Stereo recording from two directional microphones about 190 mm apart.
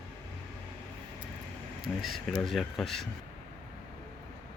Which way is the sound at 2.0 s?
Centre (ahead or behind).